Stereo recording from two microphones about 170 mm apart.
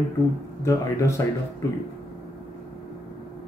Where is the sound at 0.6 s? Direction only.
15° left (ahead or behind).